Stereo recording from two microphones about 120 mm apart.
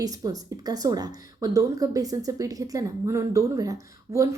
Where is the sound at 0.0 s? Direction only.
30° right (ahead or behind).